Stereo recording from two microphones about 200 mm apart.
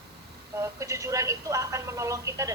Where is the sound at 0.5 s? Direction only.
15° right (ahead or behind).